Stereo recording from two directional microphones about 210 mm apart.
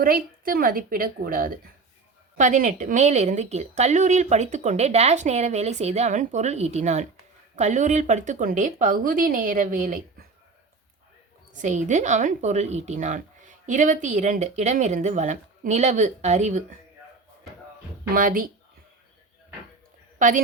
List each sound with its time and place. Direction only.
0.0 s a woman's voice: 45° right (ahead or behind)
11.5 s a woman's voice: 35° right (ahead or behind)
18.1 s a woman's voice: 40° right (ahead or behind)
20.1 s speech: 40° right (ahead or behind)